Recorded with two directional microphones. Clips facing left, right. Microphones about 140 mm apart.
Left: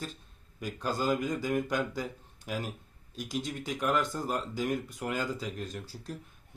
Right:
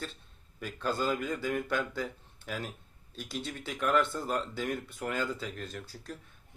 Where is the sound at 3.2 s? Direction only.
40° left (ahead or behind).